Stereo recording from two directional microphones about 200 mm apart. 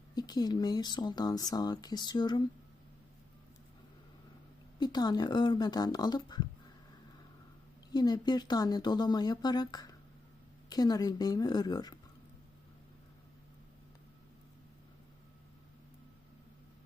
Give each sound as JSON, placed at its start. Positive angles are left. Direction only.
{"t": 0.2, "sound": "speech", "side_deg": 20}
{"t": 4.8, "sound": "speech", "side_deg": 20}
{"t": 7.9, "sound": "speech", "side_deg": 20}